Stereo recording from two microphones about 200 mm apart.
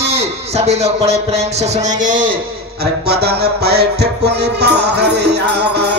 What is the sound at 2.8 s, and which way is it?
Music, 55° right (ahead or behind).